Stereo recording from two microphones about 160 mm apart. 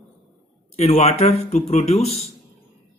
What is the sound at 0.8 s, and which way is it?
A man's voice, 45° left (ahead or behind).